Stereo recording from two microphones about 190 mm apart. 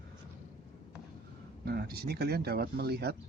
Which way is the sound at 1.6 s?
55° right (ahead or behind).